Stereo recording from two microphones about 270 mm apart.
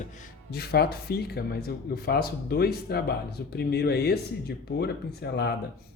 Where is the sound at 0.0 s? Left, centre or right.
Left.